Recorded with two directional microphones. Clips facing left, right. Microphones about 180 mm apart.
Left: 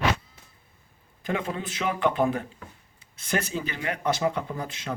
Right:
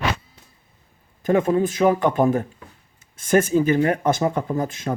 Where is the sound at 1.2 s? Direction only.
45° right (ahead or behind).